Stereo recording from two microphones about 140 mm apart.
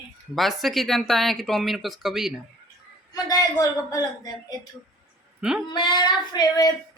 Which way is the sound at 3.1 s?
25° left (ahead or behind).